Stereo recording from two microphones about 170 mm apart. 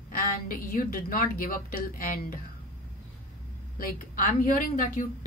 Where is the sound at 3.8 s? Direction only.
55° left (ahead or behind).